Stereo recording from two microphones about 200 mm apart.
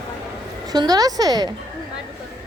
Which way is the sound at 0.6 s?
20° right (ahead or behind).